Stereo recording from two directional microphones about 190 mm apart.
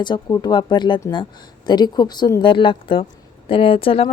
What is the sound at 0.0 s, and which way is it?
A woman's voice, 20° left (ahead or behind).